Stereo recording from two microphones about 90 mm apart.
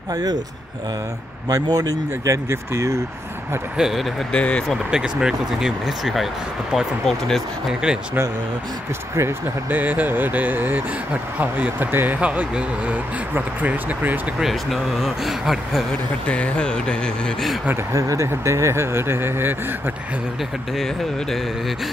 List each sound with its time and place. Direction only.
0.1 s speech: 45° right (ahead or behind)
1.5 s speech: 45° right (ahead or behind)
3.7 s speech: 5° right (ahead or behind)
4.3 s speech: 10° left (ahead or behind)
4.9 s speech: 10° right (ahead or behind)
7.8 s speech: 10° right (ahead or behind)
9.7 s speech: 20° right (ahead or behind)
14.4 s speech: centre (ahead or behind)
16.3 s speech: 10° left (ahead or behind)
17.9 s speech: 35° right (ahead or behind)
20.7 s speech: 5° left (ahead or behind)